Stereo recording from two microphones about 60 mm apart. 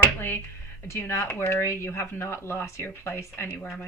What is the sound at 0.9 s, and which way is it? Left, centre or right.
Speech, left.